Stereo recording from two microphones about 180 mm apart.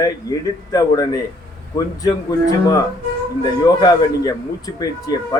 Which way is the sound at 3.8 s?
20° left (ahead or behind).